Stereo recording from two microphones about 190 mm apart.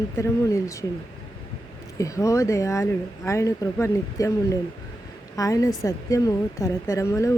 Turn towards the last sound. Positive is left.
turn(degrees=15)  # may be behind; listen again after turning